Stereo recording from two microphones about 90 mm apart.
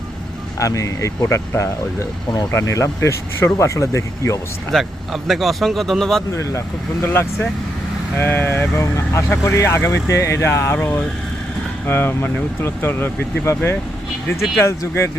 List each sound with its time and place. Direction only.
0.6 s speech: 40° left (ahead or behind)
4.7 s speech: centre (ahead or behind)
6.3 s speech: 35° left (ahead or behind)
14.6 s speech: 30° left (ahead or behind)